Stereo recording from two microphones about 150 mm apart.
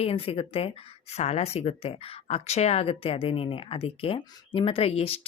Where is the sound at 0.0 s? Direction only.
40° left (ahead or behind).